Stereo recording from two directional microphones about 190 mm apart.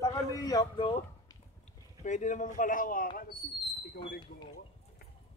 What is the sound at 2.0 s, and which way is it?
Speech, 40° left (ahead or behind).